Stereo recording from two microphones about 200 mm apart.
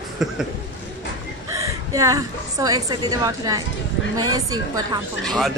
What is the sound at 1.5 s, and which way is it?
A woman's voice, 15° right (ahead or behind).